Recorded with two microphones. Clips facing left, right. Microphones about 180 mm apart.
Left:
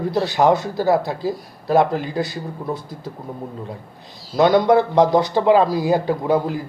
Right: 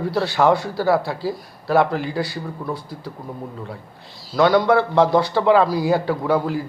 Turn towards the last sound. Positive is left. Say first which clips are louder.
# left 1 dB
turn(degrees=20)  # may be behind; listen again after turning